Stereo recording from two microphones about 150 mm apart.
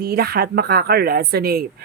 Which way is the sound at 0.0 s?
90° right.